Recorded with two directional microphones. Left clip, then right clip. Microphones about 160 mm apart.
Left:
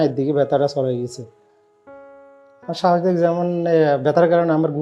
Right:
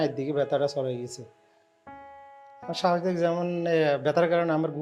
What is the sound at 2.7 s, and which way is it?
Speech, 40° left (ahead or behind).